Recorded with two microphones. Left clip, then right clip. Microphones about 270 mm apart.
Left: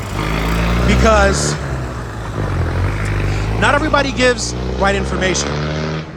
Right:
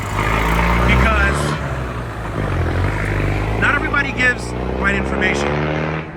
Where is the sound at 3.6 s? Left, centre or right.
Centre.